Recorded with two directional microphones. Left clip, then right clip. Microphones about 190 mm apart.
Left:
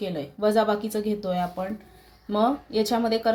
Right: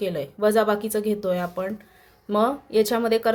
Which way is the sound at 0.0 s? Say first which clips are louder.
Right 3 dB; 45° right (ahead or behind).